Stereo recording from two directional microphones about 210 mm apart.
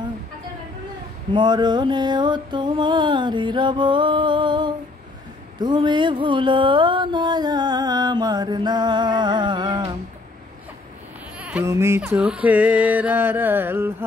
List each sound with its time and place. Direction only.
1.3 s music: 20° right (ahead or behind)
11.3 s music: 5° right (ahead or behind)